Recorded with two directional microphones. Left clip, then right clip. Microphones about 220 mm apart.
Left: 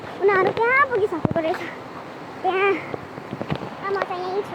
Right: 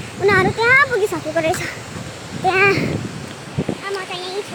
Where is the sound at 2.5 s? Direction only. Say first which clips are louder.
Right 6 dB; 15° right (ahead or behind).